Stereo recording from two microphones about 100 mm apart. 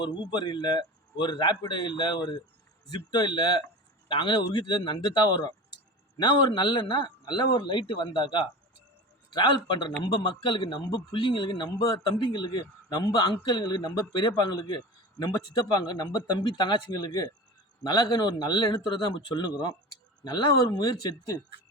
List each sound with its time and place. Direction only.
0.3 s a man's voice: 45° left (ahead or behind)